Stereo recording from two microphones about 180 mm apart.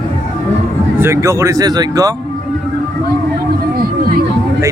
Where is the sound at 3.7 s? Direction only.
55° right (ahead or behind).